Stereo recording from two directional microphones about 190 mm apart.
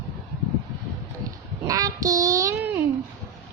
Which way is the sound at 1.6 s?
20° right (ahead or behind).